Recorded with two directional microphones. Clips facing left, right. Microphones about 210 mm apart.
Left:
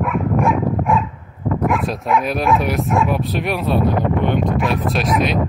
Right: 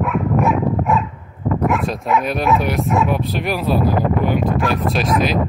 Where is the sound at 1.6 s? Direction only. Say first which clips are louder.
Even; centre (ahead or behind).